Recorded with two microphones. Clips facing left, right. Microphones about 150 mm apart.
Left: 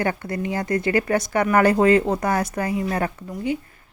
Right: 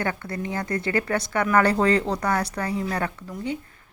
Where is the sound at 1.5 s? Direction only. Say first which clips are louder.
Left 4 dB; 10° left (ahead or behind).